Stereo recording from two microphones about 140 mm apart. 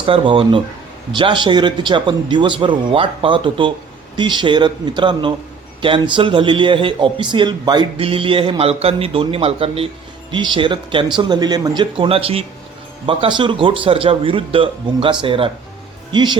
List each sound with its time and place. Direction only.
0.0 s speech: 40° right (ahead or behind)
11.8 s speech: 40° right (ahead or behind)